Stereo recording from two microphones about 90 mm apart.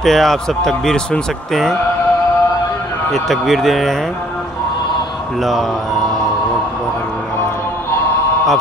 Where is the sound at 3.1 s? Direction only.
Centre (ahead or behind).